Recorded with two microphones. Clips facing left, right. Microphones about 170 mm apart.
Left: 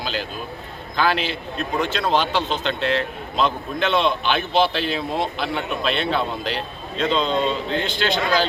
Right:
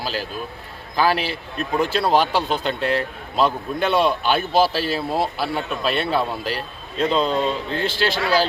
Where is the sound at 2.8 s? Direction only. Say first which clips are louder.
Left 1 dB; 40° right (ahead or behind).